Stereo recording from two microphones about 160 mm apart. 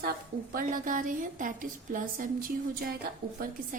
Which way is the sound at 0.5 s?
60° right (ahead or behind).